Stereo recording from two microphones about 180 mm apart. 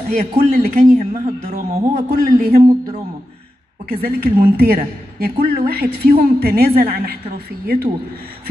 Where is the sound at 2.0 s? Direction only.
60° right (ahead or behind).